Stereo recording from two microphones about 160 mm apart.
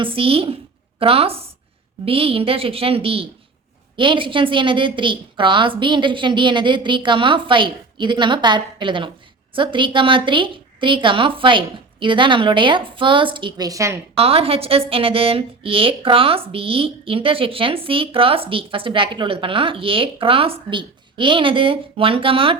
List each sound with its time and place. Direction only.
0.0 s a woman's voice: 35° right (ahead or behind); by 14.0 s 20° right (ahead or behind)
14.2 s a woman's voice: 35° right (ahead or behind)